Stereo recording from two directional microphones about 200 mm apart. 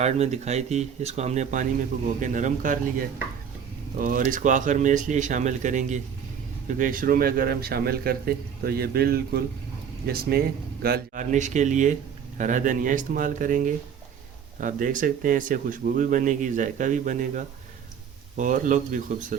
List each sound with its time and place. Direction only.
0.0 s speech: 35° right (ahead or behind)
3.9 s a man's voice: 40° right (ahead or behind)